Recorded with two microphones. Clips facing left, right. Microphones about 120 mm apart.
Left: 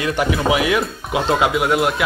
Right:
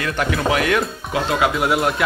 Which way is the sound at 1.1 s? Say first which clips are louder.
Left 2 dB; 20° left (ahead or behind).